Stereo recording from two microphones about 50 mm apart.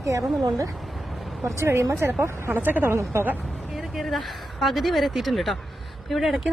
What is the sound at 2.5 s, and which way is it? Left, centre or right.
Speech, right.